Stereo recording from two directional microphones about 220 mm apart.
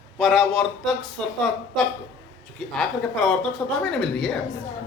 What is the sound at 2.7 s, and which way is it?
A woman's voice, centre (ahead or behind).